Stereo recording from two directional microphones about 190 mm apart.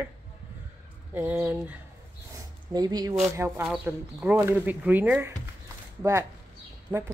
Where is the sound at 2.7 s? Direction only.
20° right (ahead or behind).